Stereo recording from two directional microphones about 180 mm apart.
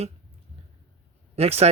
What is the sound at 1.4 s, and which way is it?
Speech, 35° right (ahead or behind).